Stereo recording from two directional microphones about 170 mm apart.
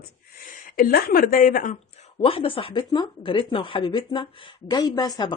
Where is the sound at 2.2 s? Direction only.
35° left (ahead or behind).